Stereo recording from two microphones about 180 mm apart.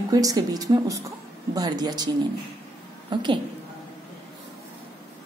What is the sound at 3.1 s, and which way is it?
Speech, 25° right (ahead or behind).